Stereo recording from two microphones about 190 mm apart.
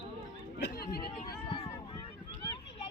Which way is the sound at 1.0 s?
25° left (ahead or behind).